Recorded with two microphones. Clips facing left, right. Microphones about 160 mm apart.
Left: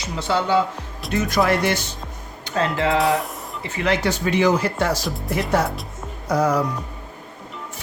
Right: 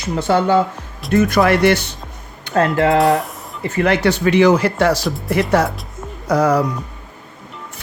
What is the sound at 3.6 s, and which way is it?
Speech, 50° right (ahead or behind).